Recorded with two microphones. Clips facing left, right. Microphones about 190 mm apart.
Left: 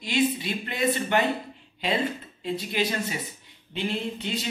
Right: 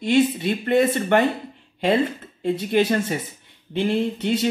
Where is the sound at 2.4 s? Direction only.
55° right (ahead or behind).